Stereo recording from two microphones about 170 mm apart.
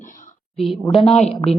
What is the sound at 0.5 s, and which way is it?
Speech, centre (ahead or behind).